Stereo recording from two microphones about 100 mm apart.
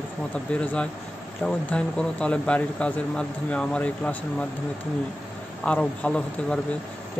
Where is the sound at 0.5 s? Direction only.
10° left (ahead or behind).